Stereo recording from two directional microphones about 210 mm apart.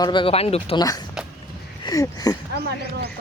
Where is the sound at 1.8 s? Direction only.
15° left (ahead or behind).